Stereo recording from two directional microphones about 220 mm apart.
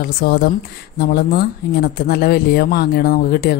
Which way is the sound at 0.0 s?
45° left (ahead or behind).